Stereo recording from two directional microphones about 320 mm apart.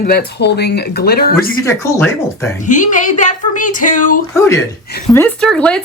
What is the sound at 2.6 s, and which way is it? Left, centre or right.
Speech, left.